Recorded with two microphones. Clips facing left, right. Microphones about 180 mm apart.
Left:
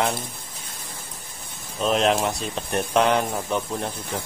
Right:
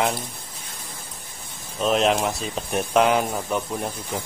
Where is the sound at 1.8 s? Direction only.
Centre (ahead or behind).